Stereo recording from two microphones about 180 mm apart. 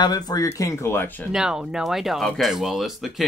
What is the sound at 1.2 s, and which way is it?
Speech, 5° right (ahead or behind).